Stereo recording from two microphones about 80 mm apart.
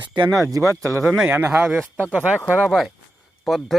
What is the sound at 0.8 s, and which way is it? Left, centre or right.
Speech, right.